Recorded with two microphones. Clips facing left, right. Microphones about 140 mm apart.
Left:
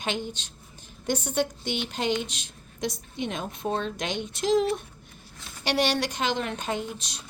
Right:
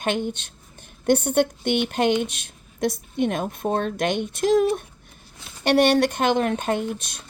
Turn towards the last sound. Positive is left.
turn(degrees=-55)  # may be behind; listen again after turning